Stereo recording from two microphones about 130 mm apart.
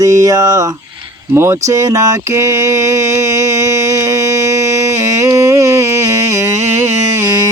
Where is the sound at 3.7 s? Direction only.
25° right (ahead or behind).